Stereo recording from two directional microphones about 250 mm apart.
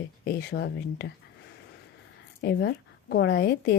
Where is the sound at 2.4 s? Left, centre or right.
Left.